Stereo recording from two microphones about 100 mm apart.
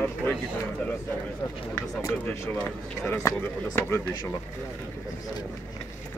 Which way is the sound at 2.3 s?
15° left (ahead or behind).